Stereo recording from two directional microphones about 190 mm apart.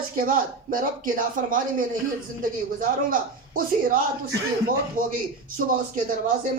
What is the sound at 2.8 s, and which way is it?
Speech, 45° right (ahead or behind).